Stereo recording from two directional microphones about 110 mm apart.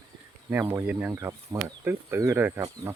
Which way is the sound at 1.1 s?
30° right (ahead or behind).